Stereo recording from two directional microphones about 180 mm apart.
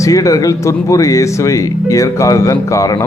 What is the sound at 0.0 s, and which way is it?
Speech, 20° left (ahead or behind).